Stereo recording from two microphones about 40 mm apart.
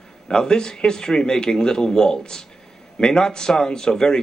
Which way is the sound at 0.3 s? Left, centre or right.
Centre.